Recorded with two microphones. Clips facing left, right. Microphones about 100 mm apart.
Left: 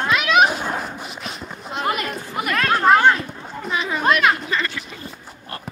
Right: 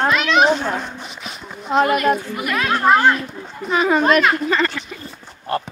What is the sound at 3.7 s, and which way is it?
Speech, 45° right (ahead or behind).